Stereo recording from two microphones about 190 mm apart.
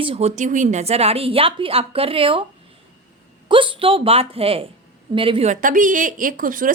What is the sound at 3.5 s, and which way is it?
A woman's voice, 25° right (ahead or behind).